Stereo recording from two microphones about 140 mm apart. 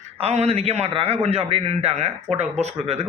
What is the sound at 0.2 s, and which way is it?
A man's voice, 45° right (ahead or behind).